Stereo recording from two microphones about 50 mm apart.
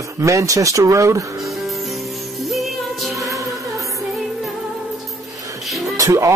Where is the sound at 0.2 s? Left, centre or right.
Right.